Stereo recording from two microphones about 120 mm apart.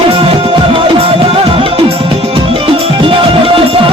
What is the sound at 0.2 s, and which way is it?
Music, 50° right (ahead or behind).